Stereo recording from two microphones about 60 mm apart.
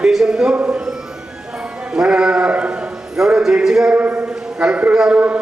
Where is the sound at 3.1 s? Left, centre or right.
Centre.